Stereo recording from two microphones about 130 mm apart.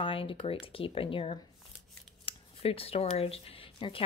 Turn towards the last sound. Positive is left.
turn(degrees=45)  # may be behind; listen again after turning